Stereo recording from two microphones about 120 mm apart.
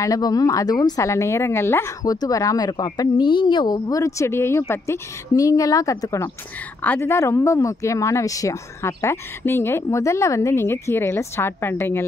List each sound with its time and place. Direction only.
0.0 s speech: 30° left (ahead or behind)